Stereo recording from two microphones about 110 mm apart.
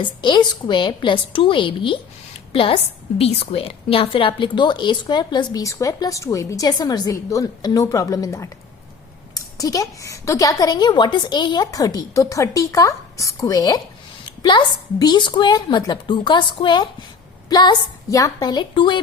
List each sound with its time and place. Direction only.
0.0 s a woman's voice: 45° left (ahead or behind)